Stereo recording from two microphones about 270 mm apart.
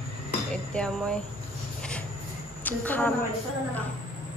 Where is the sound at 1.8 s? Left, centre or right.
Centre.